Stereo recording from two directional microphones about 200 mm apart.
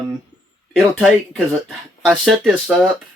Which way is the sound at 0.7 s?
Centre (ahead or behind).